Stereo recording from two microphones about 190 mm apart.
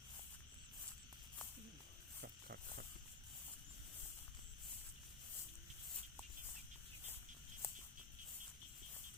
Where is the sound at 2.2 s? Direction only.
60° right (ahead or behind).